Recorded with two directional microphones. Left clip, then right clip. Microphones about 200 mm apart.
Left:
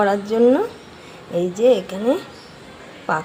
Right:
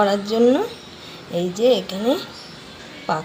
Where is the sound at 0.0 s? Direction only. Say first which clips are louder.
Left 1 dB; 5° left (ahead or behind).